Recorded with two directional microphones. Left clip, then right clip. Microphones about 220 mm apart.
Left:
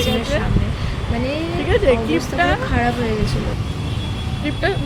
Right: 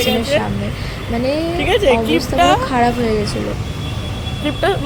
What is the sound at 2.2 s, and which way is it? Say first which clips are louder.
Speech: right 5 dB; 15° right (ahead or behind).